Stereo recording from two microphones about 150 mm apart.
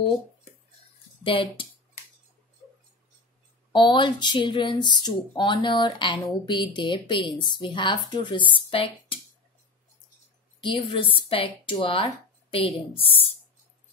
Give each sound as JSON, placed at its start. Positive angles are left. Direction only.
{"t": 1.2, "sound": "speech", "side_deg": 35}
{"t": 3.7, "sound": "speech", "side_deg": 30}
{"t": 10.6, "sound": "speech", "side_deg": 35}